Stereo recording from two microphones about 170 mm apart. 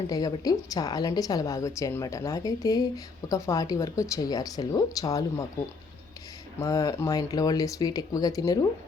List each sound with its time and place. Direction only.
0.1 s a woman's voice: 20° left (ahead or behind)
6.6 s a woman's voice: 20° left (ahead or behind)